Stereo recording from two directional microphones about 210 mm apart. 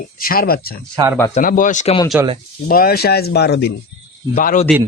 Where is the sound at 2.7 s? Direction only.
45° left (ahead or behind).